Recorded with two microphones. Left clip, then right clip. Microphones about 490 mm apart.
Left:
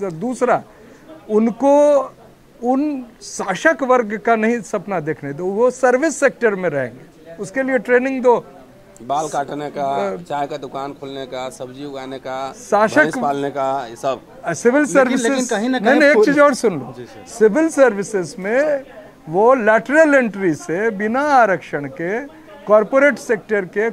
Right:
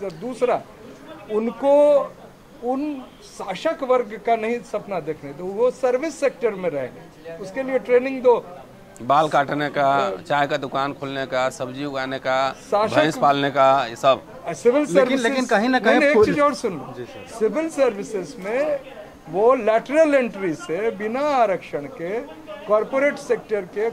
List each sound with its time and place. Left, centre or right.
0.0 s speech: left
3.3 s speech: left
9.0 s speech: centre
12.6 s speech: left
13.0 s speech: centre
14.4 s speech: left
15.0 s speech: centre
16.0 s speech: left